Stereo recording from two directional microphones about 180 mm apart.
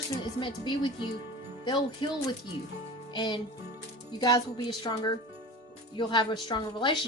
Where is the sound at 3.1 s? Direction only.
25° left (ahead or behind).